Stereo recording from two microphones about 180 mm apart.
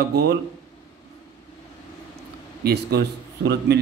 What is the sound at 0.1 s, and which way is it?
Speech, 60° right (ahead or behind).